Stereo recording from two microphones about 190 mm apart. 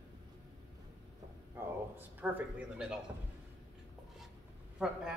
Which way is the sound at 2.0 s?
10° right (ahead or behind).